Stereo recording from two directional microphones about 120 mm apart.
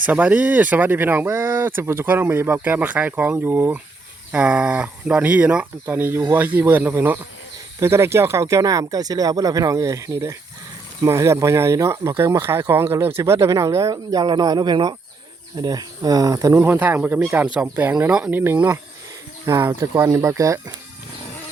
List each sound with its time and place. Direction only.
0.0 s speech: 15° right (ahead or behind); by 16.6 s 30° right (ahead or behind)
16.6 s speech: 15° right (ahead or behind)